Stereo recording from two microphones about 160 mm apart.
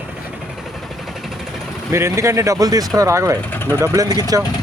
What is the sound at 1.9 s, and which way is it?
Speech, 15° right (ahead or behind).